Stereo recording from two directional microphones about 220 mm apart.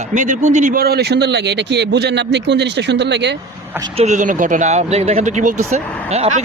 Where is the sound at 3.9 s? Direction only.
30° right (ahead or behind).